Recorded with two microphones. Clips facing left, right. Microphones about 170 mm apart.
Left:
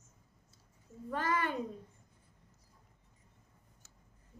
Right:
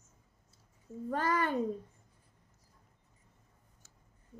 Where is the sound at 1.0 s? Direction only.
40° right (ahead or behind).